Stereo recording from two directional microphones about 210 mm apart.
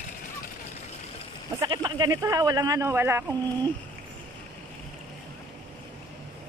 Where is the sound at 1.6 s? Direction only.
20° right (ahead or behind).